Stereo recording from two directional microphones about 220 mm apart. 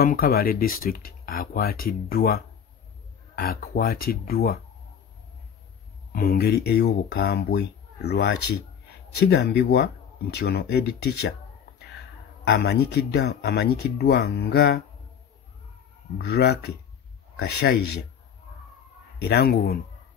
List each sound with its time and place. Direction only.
0.0 s speech: 40° left (ahead or behind)
6.1 s speech: 40° left (ahead or behind)
12.4 s speech: 50° left (ahead or behind)
16.2 s speech: 50° left (ahead or behind)
19.2 s speech: 45° left (ahead or behind)